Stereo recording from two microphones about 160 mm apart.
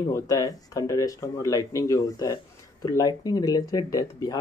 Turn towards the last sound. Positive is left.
turn(degrees=20)  # may be behind; listen again after turning